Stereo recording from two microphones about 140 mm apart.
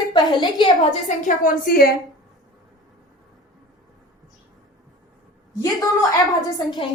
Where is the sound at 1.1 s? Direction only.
70° left (ahead or behind); by 1.9 s 90° left.